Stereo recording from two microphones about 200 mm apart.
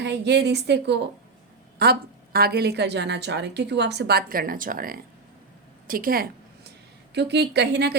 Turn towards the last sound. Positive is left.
turn(degrees=-55)  # may be behind; listen again after turning